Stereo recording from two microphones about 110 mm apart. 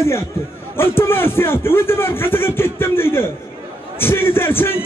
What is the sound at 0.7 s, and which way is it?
A man's voice, 20° left (ahead or behind).